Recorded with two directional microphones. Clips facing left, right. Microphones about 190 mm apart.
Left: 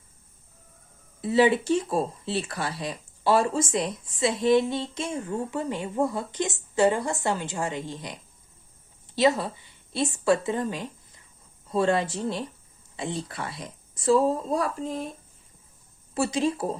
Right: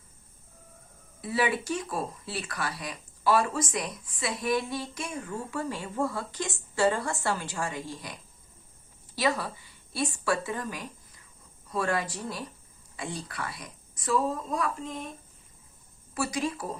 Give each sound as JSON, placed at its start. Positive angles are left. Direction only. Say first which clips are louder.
{"t": 1.2, "sound": "speech", "louder": "left 8 dB", "side_deg": 25}
{"t": 16.1, "sound": "speech", "louder": "left 5 dB", "side_deg": 25}